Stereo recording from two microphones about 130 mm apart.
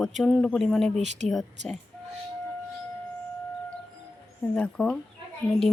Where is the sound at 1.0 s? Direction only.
60° right (ahead or behind).